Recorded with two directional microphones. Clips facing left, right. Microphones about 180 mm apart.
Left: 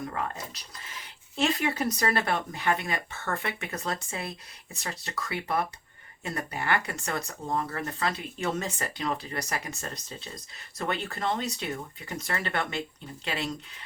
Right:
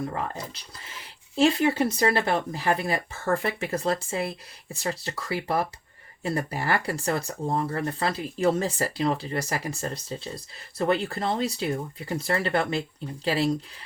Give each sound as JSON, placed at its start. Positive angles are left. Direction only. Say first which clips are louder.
{"t": 0.1, "sound": "speech", "louder": "right 2 dB", "side_deg": -30}